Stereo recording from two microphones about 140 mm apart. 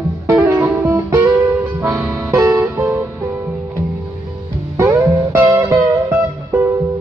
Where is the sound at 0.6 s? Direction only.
15° right (ahead or behind).